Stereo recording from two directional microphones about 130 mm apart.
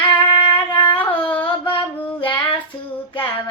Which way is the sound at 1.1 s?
40° left (ahead or behind).